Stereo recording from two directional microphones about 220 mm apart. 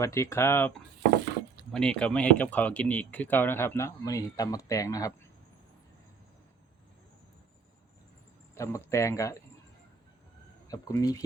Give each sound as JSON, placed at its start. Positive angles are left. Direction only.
{"t": 0.0, "sound": "speech", "side_deg": 15}
{"t": 8.5, "sound": "speech", "side_deg": 10}
{"t": 10.7, "sound": "speech", "side_deg": 15}